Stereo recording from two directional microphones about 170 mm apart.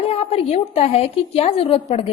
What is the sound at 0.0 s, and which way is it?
A woman's voice, 35° left (ahead or behind).